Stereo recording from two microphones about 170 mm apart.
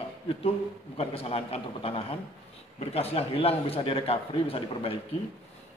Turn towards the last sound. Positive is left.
turn(degrees=35)  # may be behind; listen again after turning